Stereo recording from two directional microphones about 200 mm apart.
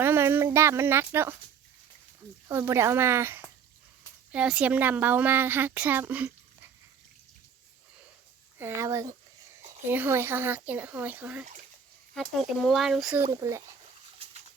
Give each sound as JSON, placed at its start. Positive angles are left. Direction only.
{"t": 0.0, "sound": "a sound", "side_deg": -10}
{"t": 2.5, "sound": "a woman's voice", "side_deg": -10}
{"t": 8.5, "sound": "a woman's voice", "side_deg": -10}
{"t": 13.2, "sound": "a woman's voice", "side_deg": -15}